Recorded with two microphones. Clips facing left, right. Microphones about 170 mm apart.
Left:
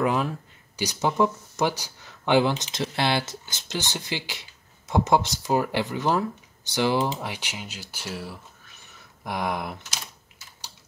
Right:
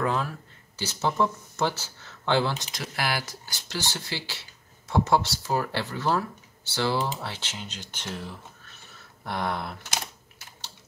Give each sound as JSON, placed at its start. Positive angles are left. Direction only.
{"t": 0.0, "sound": "speech", "side_deg": 15}